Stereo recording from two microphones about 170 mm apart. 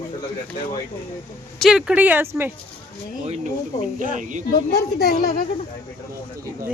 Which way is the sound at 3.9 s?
50° right (ahead or behind).